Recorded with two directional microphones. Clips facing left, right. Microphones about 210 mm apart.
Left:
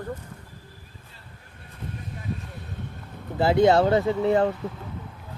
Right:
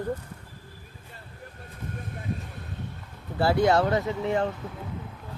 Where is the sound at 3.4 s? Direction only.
20° left (ahead or behind).